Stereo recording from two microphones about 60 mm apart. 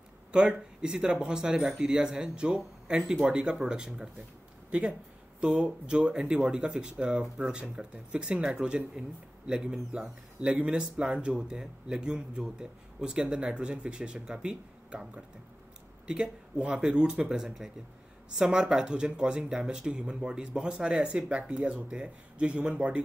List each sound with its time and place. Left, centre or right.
0.3 s a man's voice: centre